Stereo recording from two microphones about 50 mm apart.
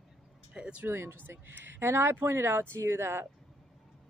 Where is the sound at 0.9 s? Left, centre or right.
Right.